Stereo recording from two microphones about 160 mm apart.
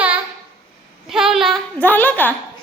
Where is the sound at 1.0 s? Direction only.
5° right (ahead or behind).